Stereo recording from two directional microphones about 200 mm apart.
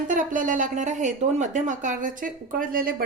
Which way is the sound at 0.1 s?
40° right (ahead or behind).